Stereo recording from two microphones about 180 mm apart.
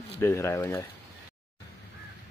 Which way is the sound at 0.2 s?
15° left (ahead or behind).